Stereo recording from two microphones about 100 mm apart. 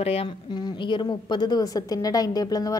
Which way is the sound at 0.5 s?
50° left (ahead or behind).